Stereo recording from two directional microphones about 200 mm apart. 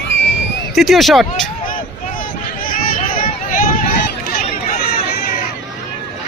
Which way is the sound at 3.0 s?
40° left (ahead or behind).